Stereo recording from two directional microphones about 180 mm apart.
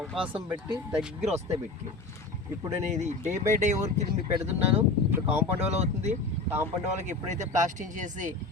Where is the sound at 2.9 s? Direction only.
40° right (ahead or behind).